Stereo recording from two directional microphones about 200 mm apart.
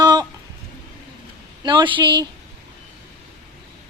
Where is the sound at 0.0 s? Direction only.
20° right (ahead or behind).